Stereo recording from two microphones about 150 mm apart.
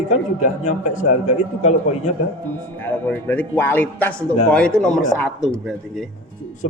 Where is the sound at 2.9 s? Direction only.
10° left (ahead or behind).